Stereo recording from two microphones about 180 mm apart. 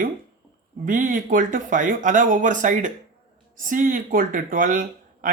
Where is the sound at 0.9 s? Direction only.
45° right (ahead or behind).